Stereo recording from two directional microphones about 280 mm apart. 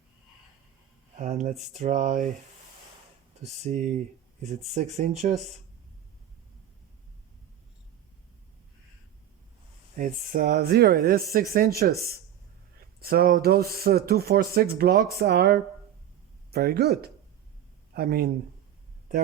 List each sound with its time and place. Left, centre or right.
1.2 s speech: right
3.4 s speech: right
9.9 s speech: right